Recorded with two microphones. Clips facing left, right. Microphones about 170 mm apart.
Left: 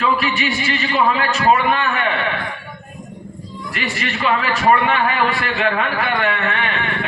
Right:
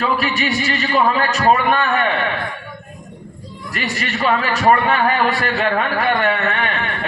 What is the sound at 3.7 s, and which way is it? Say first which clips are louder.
A man's voice: right 1 dB; 40° right (ahead or behind).